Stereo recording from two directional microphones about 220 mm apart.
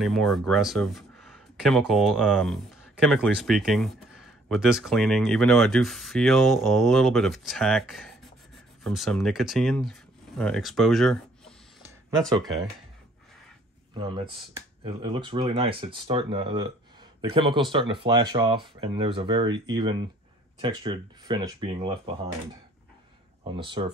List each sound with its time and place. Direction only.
0.0 s speech: centre (ahead or behind)
12.2 s speech: 15° right (ahead or behind)
14.8 s speech: 20° right (ahead or behind)
23.5 s speech: 20° right (ahead or behind)